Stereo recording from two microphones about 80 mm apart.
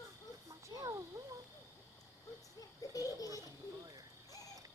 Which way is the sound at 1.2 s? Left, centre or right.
Right.